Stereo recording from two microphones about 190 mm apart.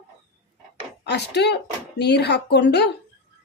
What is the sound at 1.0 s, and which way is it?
A woman's voice, 65° left (ahead or behind).